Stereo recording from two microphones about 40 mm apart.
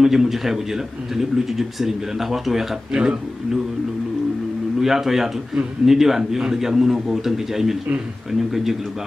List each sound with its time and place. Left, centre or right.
0.0 s a man's voice: centre
2.9 s speech: right
4.7 s a man's voice: centre